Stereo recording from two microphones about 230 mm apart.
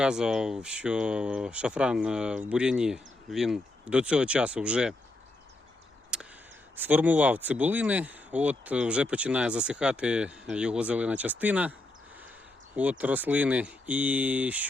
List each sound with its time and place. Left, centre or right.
0.0 s speech: centre
6.1 s a sound: centre
6.7 s speech: centre
12.7 s speech: centre